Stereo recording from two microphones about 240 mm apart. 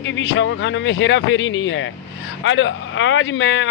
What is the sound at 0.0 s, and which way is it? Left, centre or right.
Speech, left.